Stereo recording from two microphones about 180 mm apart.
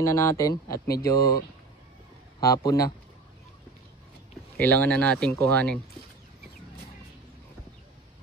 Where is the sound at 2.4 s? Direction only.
20° left (ahead or behind).